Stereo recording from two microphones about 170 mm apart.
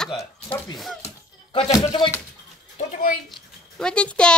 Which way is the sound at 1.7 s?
25° left (ahead or behind).